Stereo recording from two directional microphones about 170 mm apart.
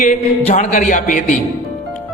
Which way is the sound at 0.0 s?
45° left (ahead or behind).